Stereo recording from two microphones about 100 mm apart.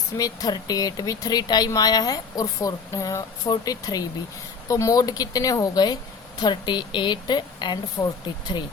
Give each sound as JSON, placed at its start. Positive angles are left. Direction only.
{"t": 0.2, "sound": "a woman's voice", "side_deg": 40}
{"t": 8.0, "sound": "speech", "side_deg": 15}